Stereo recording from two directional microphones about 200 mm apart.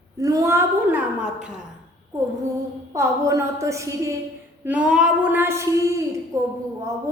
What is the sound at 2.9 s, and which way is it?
Music, 15° right (ahead or behind).